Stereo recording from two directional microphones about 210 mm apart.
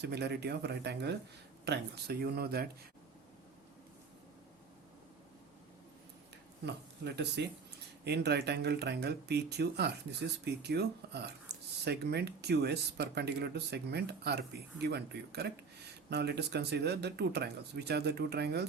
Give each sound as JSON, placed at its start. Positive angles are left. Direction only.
{"t": 0.0, "sound": "speech", "side_deg": -50}
{"t": 7.0, "sound": "speech", "side_deg": -55}